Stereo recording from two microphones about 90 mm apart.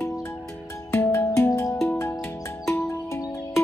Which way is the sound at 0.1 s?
30° left (ahead or behind).